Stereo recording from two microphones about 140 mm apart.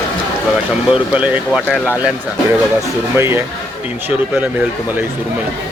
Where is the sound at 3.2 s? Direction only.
15° right (ahead or behind).